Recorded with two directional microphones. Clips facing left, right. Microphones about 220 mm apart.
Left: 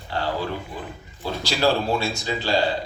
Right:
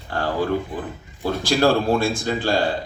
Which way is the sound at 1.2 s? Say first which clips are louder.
Right 4 dB; 50° right (ahead or behind).